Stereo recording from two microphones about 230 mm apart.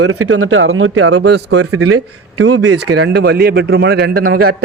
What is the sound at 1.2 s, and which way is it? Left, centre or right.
Speech, right.